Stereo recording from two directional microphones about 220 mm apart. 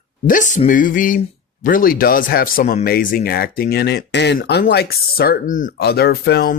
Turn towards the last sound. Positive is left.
turn(degrees=45)  # may be behind; listen again after turning